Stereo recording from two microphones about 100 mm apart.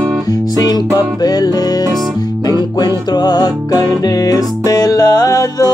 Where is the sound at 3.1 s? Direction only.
45° left (ahead or behind).